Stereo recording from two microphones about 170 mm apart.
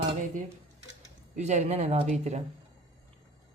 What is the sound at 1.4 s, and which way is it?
Speech, 40° right (ahead or behind).